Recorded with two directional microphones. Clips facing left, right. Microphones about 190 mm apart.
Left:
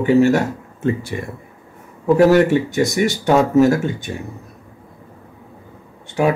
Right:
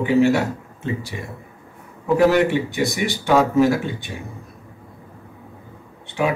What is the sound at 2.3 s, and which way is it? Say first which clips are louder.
Speech: left 4 dB; 45° left (ahead or behind).